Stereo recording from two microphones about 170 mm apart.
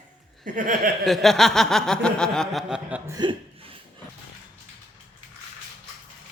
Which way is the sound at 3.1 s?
25° right (ahead or behind).